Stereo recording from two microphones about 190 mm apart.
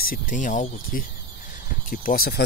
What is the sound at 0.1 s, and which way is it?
Speech, 45° left (ahead or behind).